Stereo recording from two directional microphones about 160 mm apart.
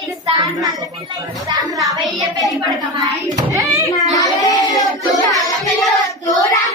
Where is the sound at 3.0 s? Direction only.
20° right (ahead or behind).